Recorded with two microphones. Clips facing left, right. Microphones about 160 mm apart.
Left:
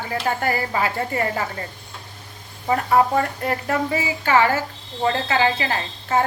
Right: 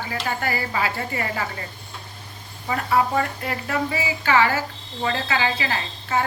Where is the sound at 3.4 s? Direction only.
45° left (ahead or behind).